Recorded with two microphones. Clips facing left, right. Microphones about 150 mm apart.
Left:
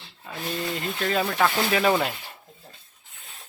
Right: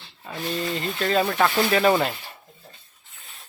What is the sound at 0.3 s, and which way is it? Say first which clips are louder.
Speech: right 2 dB; 5° left (ahead or behind).